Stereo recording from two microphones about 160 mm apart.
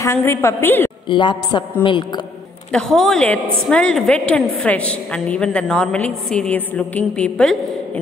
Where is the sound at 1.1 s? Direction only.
30° left (ahead or behind).